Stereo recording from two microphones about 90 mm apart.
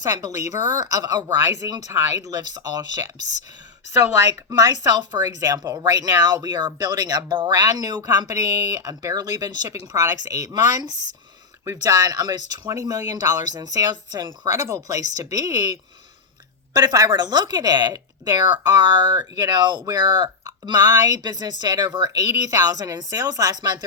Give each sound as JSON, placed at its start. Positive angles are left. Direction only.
{"t": 0.0, "sound": "speech", "side_deg": -45}
{"t": 1.9, "sound": "speech", "side_deg": -40}
{"t": 4.4, "sound": "speech", "side_deg": -45}